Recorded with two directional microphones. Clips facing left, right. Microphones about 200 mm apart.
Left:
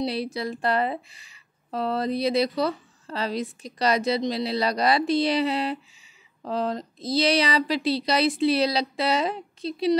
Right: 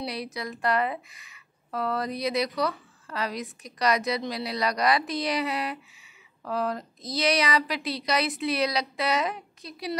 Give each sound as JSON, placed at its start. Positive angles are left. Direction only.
{"t": 0.0, "sound": "speech", "side_deg": 30}